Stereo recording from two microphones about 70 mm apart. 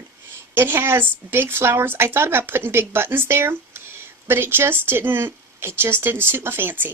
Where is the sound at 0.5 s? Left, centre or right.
Right.